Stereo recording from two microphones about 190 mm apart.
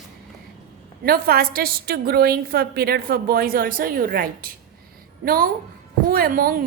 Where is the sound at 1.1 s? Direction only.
55° right (ahead or behind).